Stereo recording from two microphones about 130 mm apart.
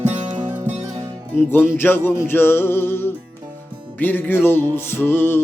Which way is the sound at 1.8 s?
15° left (ahead or behind).